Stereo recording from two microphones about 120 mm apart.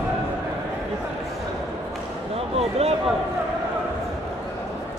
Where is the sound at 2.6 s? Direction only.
60° right (ahead or behind).